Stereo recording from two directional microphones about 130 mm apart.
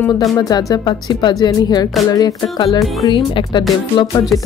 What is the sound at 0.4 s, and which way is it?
A woman's voice, 30° left (ahead or behind).